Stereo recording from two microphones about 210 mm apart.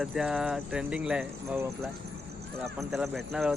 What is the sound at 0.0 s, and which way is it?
Speech, centre (ahead or behind).